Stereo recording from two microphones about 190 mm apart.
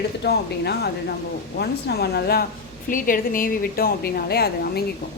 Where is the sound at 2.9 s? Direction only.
45° left (ahead or behind).